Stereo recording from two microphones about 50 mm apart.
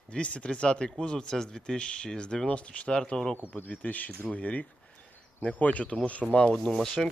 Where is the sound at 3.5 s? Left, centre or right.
Left.